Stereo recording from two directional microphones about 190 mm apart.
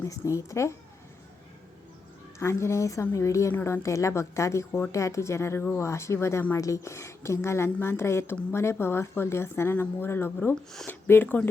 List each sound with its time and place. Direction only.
0.0 s a woman's voice: 15° left (ahead or behind)
2.4 s a woman's voice: 15° left (ahead or behind)